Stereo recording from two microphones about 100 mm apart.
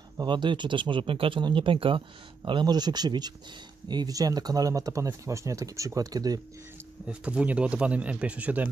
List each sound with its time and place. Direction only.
0.2 s speech: 50° right (ahead or behind)
7.1 s speech: 10° right (ahead or behind)